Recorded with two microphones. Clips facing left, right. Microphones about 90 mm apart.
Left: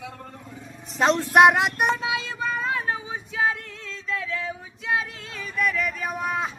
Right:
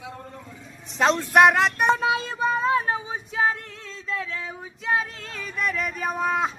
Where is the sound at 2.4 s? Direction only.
30° right (ahead or behind).